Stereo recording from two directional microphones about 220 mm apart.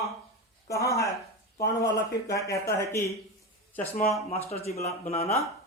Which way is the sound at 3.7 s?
40° left (ahead or behind).